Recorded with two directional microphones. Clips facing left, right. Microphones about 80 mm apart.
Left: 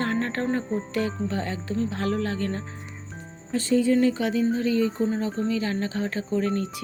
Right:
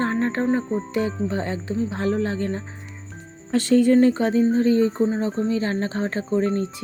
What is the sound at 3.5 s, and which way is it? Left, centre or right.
Speech, right.